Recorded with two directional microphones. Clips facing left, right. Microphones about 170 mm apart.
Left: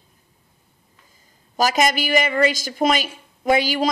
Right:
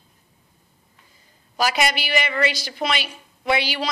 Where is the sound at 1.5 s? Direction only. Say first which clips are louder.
Left 3 dB; 45° left (ahead or behind).